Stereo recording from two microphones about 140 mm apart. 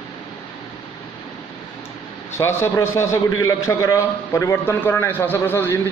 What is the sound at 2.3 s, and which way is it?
A man's voice, 20° left (ahead or behind).